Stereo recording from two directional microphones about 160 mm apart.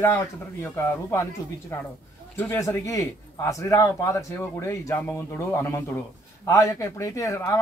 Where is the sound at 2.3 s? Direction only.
20° left (ahead or behind).